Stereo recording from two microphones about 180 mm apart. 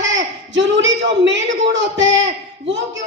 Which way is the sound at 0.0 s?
90° right.